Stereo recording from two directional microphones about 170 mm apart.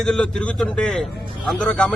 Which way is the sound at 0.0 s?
5° left (ahead or behind).